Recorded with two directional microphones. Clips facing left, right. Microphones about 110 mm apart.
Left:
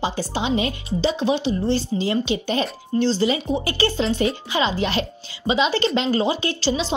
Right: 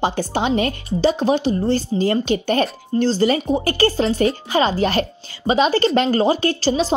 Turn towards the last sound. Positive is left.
turn(degrees=-45)  # may be behind; listen again after turning